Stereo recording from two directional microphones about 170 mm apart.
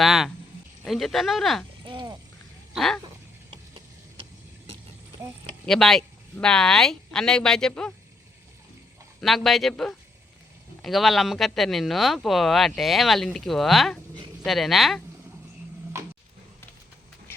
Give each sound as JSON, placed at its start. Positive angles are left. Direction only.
{"t": 0.0, "sound": "a sound", "side_deg": 0}
{"t": 0.9, "sound": "speech", "side_deg": 0}
{"t": 1.8, "sound": "speech", "side_deg": -30}
{"t": 2.7, "sound": "speech", "side_deg": 0}
{"t": 5.6, "sound": "speech", "side_deg": 0}
{"t": 9.2, "sound": "speech", "side_deg": 0}